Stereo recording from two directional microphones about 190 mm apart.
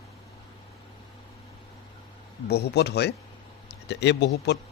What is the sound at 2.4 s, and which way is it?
Speech, 60° left (ahead or behind).